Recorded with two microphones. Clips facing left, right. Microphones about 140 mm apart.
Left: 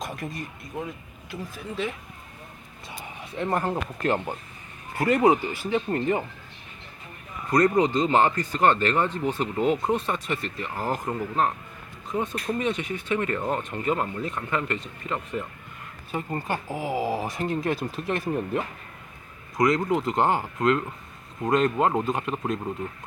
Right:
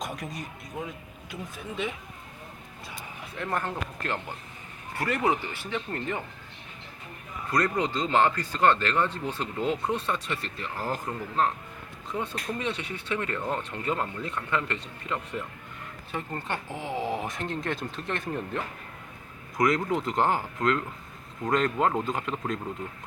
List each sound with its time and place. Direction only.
0.2 s speech: centre (ahead or behind)
3.3 s speech: 30° left (ahead or behind)
4.9 s speech: 15° left (ahead or behind)
7.5 s speech: 15° left (ahead or behind)